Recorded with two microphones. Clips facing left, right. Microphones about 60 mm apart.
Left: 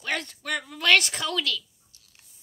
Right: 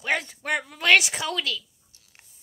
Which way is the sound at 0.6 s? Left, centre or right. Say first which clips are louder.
Right 1 dB; centre.